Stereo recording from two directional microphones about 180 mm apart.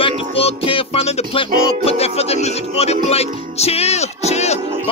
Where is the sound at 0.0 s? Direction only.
30° left (ahead or behind).